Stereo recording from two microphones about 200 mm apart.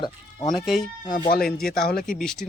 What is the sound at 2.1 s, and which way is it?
Speech, centre (ahead or behind).